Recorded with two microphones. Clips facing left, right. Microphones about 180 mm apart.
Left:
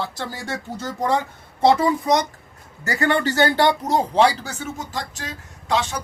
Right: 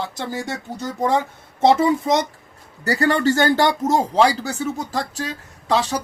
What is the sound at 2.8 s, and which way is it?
Speech, 35° right (ahead or behind).